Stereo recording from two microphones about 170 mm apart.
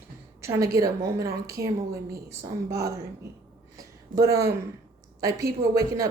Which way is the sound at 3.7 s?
20° right (ahead or behind).